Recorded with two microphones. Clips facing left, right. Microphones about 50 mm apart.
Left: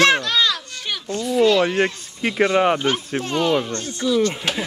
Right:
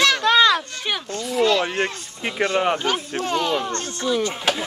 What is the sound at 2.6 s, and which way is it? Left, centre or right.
Speech, centre.